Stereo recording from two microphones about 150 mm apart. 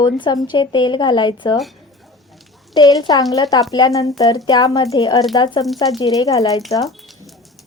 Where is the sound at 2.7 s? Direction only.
25° left (ahead or behind).